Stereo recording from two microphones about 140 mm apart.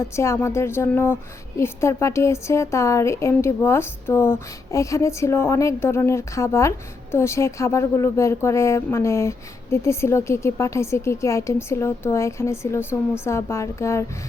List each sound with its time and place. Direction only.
0.0 s a woman's voice: 20° left (ahead or behind)